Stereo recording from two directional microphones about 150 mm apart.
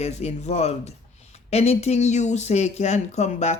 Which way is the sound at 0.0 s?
45° left (ahead or behind).